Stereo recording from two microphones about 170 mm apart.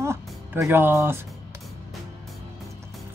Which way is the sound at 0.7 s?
15° right (ahead or behind).